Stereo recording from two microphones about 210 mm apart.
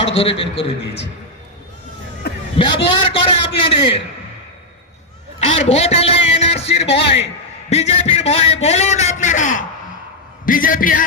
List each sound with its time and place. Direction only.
0.2 s a man's voice: 25° left (ahead or behind)
2.5 s a man's voice: 25° left (ahead or behind)
5.4 s music: 30° left (ahead or behind)
7.7 s a man's voice: 30° left (ahead or behind)